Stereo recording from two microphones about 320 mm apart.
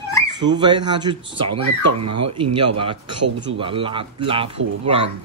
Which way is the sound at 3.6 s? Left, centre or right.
Centre.